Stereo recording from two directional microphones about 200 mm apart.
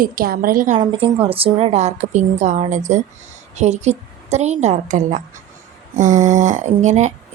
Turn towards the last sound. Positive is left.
turn(degrees=-35)  # may be behind; listen again after turning